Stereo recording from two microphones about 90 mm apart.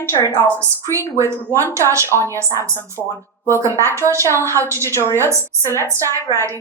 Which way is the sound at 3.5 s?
35° right (ahead or behind).